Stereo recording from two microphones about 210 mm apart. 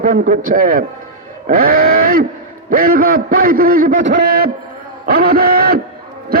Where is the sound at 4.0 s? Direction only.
60° right (ahead or behind).